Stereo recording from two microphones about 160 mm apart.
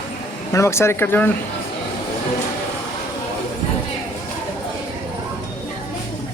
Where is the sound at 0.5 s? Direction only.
15° left (ahead or behind).